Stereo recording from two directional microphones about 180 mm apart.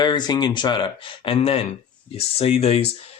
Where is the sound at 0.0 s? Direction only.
25° left (ahead or behind).